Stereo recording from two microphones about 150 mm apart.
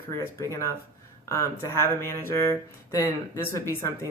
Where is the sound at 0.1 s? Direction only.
20° left (ahead or behind).